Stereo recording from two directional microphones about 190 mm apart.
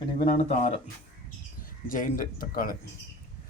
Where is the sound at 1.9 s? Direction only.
45° left (ahead or behind).